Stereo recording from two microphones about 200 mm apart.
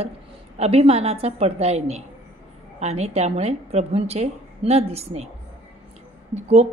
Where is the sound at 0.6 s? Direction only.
30° right (ahead or behind).